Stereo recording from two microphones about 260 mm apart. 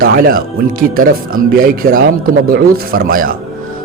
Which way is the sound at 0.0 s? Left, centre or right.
Right.